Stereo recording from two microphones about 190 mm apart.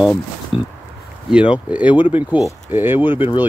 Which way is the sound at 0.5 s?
25° left (ahead or behind).